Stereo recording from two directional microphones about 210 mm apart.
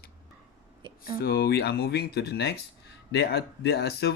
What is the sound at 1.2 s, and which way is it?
Speech, 45° left (ahead or behind).